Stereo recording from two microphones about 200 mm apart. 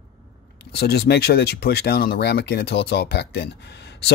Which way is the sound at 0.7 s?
55° left (ahead or behind).